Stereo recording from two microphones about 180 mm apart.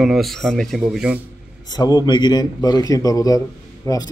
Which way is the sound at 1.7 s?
20° left (ahead or behind).